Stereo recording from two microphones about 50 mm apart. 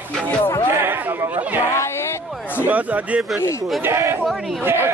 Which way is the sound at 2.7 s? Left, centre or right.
Right.